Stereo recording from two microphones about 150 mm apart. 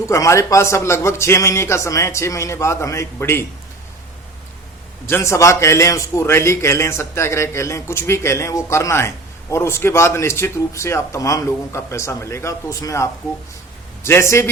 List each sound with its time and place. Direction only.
0.0 s a man's voice: 20° left (ahead or behind)
5.0 s a man's voice: 15° left (ahead or behind)